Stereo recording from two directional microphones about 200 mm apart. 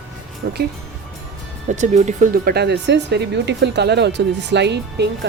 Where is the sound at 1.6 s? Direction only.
35° right (ahead or behind).